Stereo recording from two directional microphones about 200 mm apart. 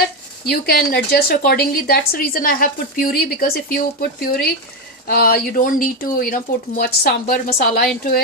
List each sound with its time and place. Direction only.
0.4 s a woman's voice: 50° left (ahead or behind)